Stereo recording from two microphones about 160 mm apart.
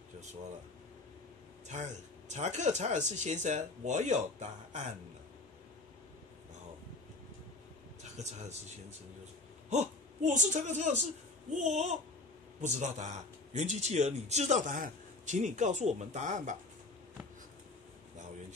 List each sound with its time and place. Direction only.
1.7 s speech: 45° right (ahead or behind)
8.0 s speech: 45° right (ahead or behind)
9.7 s a woman's voice: 50° right (ahead or behind)